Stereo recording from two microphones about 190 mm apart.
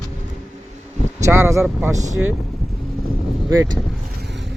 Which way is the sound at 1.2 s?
15° right (ahead or behind).